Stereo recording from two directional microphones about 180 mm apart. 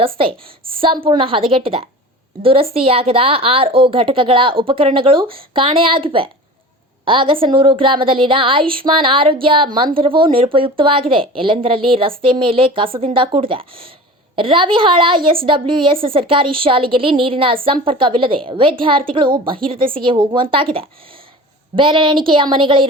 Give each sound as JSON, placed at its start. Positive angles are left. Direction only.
{"t": 0.2, "sound": "a woman's voice", "side_deg": -30}
{"t": 21.8, "sound": "a woman's voice", "side_deg": -30}